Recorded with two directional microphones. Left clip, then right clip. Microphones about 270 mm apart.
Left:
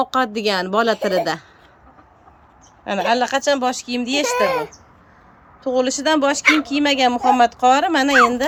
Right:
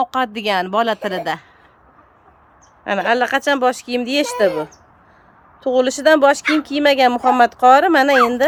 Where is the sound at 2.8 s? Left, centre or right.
Centre.